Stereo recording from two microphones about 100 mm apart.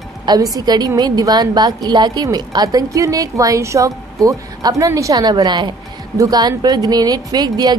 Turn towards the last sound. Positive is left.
turn(degrees=-40)  # may be behind; listen again after turning